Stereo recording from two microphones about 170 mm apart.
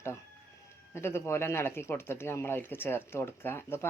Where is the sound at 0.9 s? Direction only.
15° left (ahead or behind).